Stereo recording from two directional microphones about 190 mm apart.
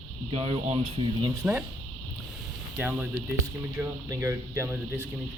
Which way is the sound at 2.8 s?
5° right (ahead or behind).